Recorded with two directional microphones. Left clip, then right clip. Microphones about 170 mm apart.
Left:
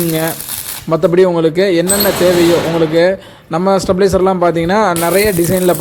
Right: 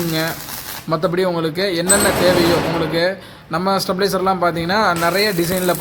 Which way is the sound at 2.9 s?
40° left (ahead or behind).